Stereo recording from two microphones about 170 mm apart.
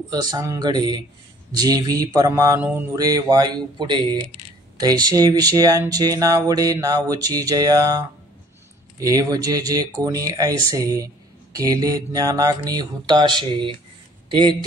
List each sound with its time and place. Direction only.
0.1 s speech: 25° right (ahead or behind)
9.0 s speech: 20° right (ahead or behind)